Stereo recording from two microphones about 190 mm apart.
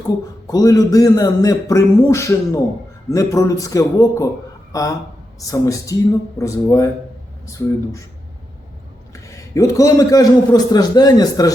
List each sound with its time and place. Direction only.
0.4 s a man's voice: 20° left (ahead or behind)
9.1 s a man's voice: 15° left (ahead or behind)